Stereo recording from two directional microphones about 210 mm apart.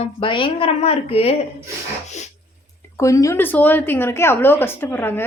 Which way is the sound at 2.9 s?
15° left (ahead or behind).